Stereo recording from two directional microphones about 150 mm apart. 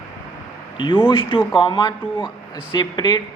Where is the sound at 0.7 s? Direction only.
30° left (ahead or behind).